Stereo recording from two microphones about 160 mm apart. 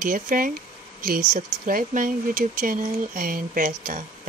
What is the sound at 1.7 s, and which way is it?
Speech, 60° right (ahead or behind).